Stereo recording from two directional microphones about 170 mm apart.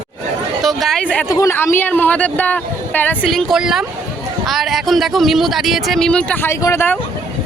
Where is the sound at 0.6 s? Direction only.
Centre (ahead or behind).